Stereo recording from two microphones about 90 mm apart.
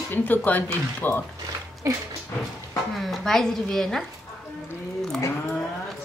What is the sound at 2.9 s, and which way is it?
Speech, centre (ahead or behind).